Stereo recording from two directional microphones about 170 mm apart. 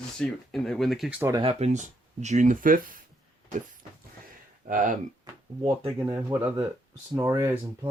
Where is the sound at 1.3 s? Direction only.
35° right (ahead or behind); by 3.0 s 55° right (ahead or behind).